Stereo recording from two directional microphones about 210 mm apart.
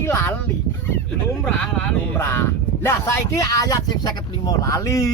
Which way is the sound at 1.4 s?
10° left (ahead or behind).